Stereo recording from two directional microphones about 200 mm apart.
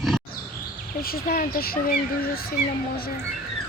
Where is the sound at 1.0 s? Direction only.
50° left (ahead or behind).